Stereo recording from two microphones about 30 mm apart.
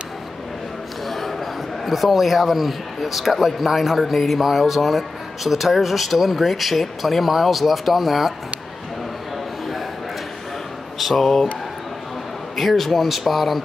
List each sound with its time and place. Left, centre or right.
1.0 s a sound: centre
1.9 s speech: centre
11.1 s speech: centre
12.5 s speech: centre